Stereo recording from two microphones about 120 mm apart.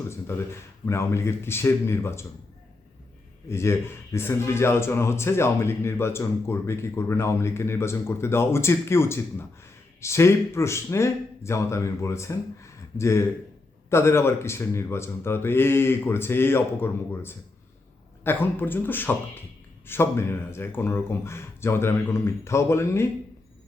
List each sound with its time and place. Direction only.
0.1 s speech: 20° left (ahead or behind)
3.5 s a man's voice: 20° left (ahead or behind)